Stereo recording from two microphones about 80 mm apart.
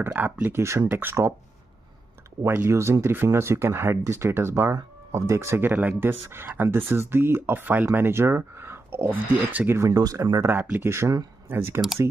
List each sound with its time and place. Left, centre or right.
0.0 s speech: right
2.4 s speech: right
9.8 s speech: right
10.6 s speech: right
10.9 s speech: right